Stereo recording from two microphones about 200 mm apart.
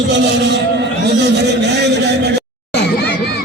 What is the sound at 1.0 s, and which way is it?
A man's voice, 60° right (ahead or behind).